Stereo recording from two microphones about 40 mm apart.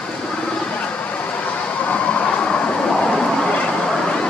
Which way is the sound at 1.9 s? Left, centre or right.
Left.